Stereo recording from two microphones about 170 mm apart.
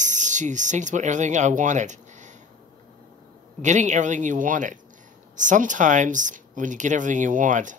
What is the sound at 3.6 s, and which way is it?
Speech, 45° right (ahead or behind).